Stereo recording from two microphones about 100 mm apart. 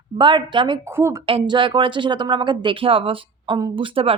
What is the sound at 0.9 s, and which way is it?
Speech, 25° right (ahead or behind).